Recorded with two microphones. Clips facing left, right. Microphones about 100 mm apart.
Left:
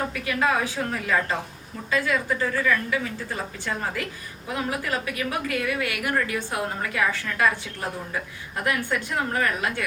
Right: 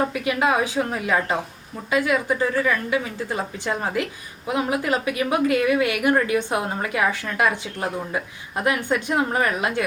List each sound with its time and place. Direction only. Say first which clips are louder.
0.0 s a woman's voice: right 4 dB; 20° right (ahead or behind)